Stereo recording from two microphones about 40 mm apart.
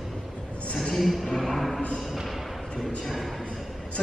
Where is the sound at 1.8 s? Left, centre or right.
Left.